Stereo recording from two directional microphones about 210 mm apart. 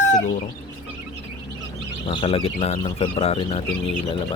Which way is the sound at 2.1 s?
25° left (ahead or behind).